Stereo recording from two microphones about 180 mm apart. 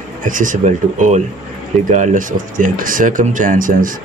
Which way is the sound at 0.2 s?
45° right (ahead or behind).